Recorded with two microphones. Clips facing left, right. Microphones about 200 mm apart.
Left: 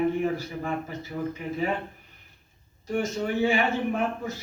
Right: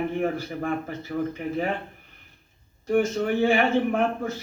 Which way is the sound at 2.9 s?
55° right (ahead or behind).